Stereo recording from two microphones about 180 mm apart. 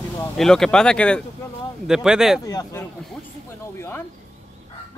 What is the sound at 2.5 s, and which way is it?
Speech, 20° left (ahead or behind).